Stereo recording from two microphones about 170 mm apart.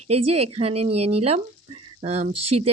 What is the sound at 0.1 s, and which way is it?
Speech, 35° right (ahead or behind).